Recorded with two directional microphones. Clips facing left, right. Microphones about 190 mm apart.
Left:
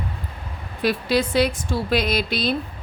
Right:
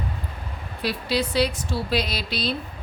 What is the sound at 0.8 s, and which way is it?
A woman's voice, 50° left (ahead or behind).